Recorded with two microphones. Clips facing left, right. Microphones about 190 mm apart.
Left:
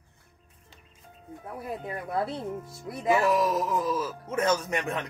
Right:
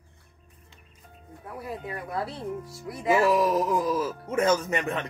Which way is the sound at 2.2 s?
25° left (ahead or behind).